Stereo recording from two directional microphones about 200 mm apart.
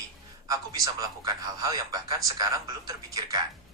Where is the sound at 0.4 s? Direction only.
20° right (ahead or behind).